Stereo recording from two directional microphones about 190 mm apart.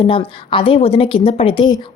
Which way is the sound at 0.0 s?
30° left (ahead or behind).